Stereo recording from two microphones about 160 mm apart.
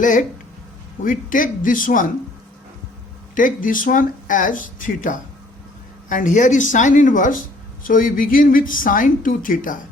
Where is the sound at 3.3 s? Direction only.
55° left (ahead or behind).